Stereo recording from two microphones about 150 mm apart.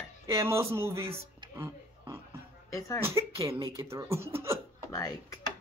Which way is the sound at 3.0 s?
20° right (ahead or behind).